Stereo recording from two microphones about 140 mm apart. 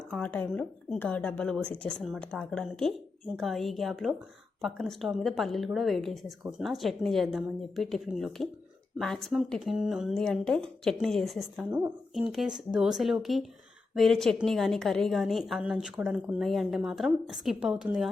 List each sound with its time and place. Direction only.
0.1 s a woman's voice: 10° left (ahead or behind)